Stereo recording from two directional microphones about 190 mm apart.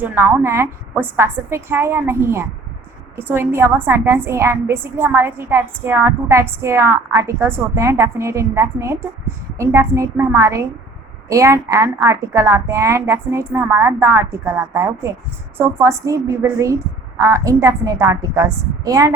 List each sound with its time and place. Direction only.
0.0 s a woman's voice: 10° right (ahead or behind)